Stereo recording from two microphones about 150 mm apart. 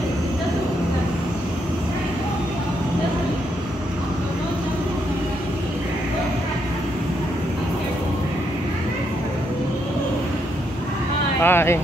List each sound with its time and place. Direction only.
11.4 s speech: 15° left (ahead or behind)